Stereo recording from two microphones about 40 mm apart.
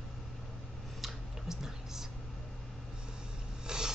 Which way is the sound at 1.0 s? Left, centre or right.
Centre.